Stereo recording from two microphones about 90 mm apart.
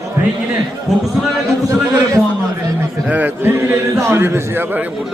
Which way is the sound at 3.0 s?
20° right (ahead or behind).